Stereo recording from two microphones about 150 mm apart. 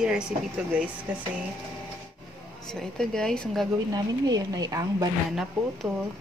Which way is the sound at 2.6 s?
5° left (ahead or behind).